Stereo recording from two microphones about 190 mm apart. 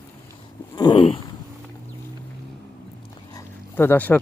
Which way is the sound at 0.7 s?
20° left (ahead or behind).